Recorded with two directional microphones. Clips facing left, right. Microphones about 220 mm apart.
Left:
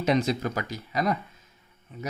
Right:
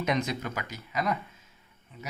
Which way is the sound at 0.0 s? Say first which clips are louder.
Left 5 dB; 30° left (ahead or behind).